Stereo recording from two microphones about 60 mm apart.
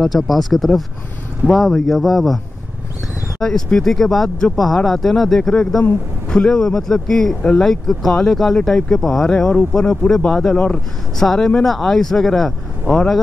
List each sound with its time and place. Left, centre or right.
0.0 s speech: centre